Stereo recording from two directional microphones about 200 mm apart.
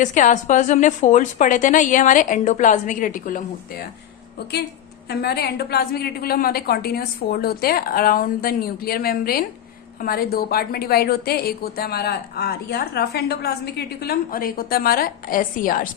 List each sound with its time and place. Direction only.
0.0 s a woman's voice: 40° left (ahead or behind)
5.0 s a woman's voice: 50° left (ahead or behind)